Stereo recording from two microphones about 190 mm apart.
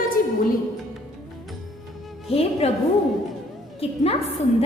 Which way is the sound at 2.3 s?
30° left (ahead or behind).